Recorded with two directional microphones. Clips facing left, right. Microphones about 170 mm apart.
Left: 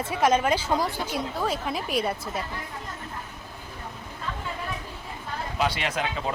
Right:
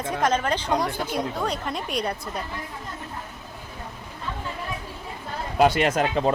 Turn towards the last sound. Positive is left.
turn(degrees=-45)  # may be behind; listen again after turning